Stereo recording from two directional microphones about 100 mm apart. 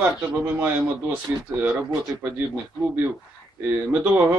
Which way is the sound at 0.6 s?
15° right (ahead or behind).